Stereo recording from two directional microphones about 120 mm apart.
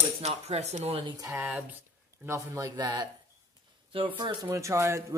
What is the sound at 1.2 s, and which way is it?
Speech, 25° right (ahead or behind).